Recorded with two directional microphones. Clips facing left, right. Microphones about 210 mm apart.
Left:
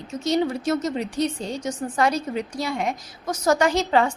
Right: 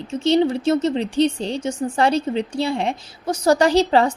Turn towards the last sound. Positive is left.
turn(degrees=-35)  # may be behind; listen again after turning